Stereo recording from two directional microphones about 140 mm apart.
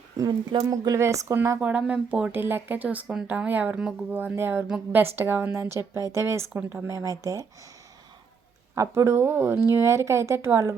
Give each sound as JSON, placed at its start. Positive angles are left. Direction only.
{"t": 0.2, "sound": "speech", "side_deg": -30}
{"t": 8.7, "sound": "speech", "side_deg": -20}